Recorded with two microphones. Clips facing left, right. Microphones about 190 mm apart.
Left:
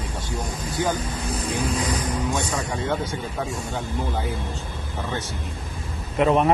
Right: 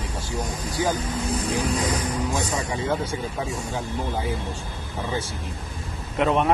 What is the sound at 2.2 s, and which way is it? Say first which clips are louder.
Speech: even; centre (ahead or behind).